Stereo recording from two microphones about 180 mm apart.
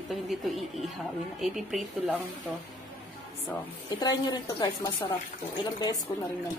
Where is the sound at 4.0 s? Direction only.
20° left (ahead or behind).